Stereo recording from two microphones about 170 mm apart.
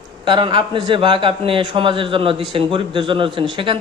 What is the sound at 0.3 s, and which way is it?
A man's voice, 30° right (ahead or behind).